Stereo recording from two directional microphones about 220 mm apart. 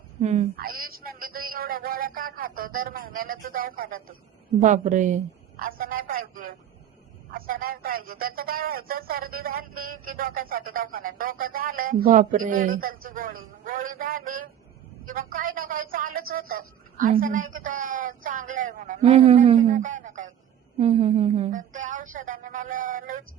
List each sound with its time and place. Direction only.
0.2 s a child's voice: 30° right (ahead or behind)
0.5 s speech: 40° right (ahead or behind)